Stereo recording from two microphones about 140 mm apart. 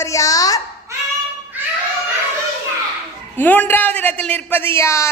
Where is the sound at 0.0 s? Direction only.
25° left (ahead or behind).